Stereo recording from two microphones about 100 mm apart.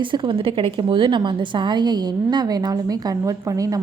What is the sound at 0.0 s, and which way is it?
A woman's voice, 55° right (ahead or behind).